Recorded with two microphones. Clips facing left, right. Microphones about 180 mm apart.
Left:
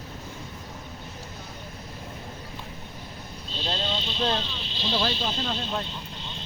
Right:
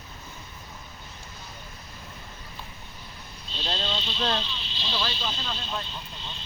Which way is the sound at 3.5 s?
45° left (ahead or behind).